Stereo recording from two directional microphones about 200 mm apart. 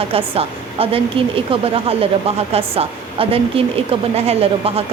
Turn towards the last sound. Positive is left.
turn(degrees=-30)  # may be behind; listen again after turning